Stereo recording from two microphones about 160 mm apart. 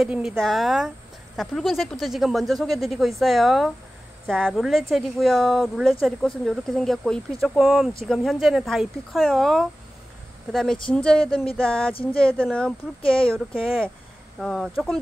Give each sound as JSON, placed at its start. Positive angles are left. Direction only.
{"t": 0.0, "sound": "speech", "side_deg": -5}
{"t": 13.0, "sound": "speech", "side_deg": 35}
{"t": 14.4, "sound": "speech", "side_deg": 0}